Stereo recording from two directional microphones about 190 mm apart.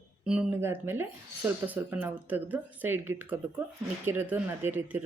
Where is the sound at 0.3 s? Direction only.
5° right (ahead or behind).